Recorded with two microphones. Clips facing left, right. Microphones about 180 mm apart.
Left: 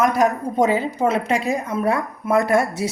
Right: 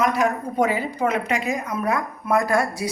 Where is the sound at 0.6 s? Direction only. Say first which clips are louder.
Left 3 dB; 20° left (ahead or behind).